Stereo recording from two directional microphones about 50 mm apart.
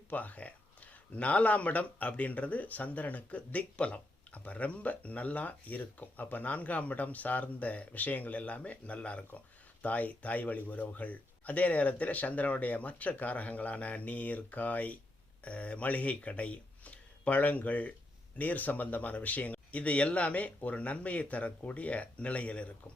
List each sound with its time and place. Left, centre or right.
0.1 s a man's voice: left